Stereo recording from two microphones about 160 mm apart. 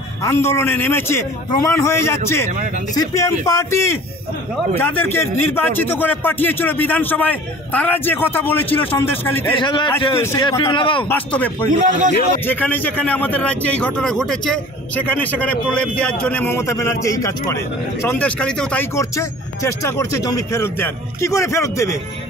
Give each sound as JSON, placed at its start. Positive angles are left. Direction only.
{"t": 0.2, "sound": "a man's voice", "side_deg": 15}
{"t": 2.5, "sound": "speech", "side_deg": -50}
{"t": 2.9, "sound": "a man's voice", "side_deg": 20}
{"t": 9.6, "sound": "a man's voice", "side_deg": 30}
{"t": 10.1, "sound": "a man's voice", "side_deg": 15}
{"t": 10.7, "sound": "a man's voice", "side_deg": 30}
{"t": 11.1, "sound": "a man's voice", "side_deg": 10}
{"t": 18.9, "sound": "speech", "side_deg": 20}